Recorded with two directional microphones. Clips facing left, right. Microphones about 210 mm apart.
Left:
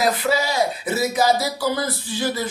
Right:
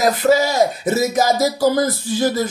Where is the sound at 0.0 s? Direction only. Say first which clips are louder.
Right 6 dB; 45° right (ahead or behind).